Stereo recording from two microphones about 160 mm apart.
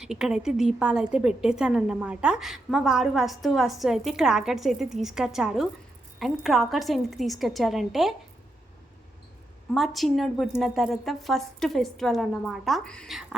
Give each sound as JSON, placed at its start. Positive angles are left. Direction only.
{"t": 0.0, "sound": "a woman's voice", "side_deg": -5}
{"t": 9.7, "sound": "a woman's voice", "side_deg": 0}